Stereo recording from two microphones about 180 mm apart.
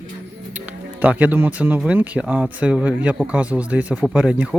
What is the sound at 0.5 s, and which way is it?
Speech, 10° right (ahead or behind).